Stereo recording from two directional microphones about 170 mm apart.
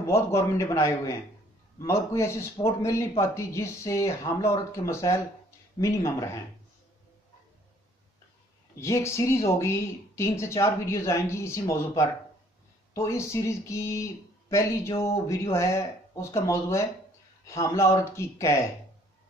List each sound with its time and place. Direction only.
0.0 s speech: 15° left (ahead or behind)
8.7 s speech: 15° left (ahead or behind)